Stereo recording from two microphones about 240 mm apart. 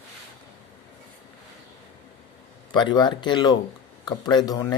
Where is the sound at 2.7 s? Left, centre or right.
Centre.